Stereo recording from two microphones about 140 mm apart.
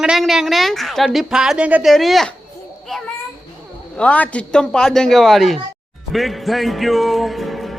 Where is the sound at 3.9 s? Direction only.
10° left (ahead or behind).